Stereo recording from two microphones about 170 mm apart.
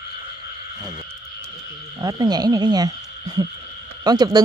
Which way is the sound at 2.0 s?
20° right (ahead or behind).